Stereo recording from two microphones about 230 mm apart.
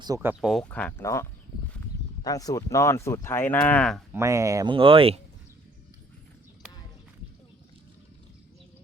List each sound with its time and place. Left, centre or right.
0.0 s speech: centre
0.6 s speech: centre
4.1 s speech: centre